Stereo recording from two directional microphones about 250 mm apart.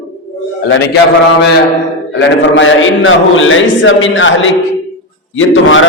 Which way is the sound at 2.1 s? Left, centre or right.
Left.